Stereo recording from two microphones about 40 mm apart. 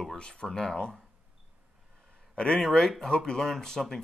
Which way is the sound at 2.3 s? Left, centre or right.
Left.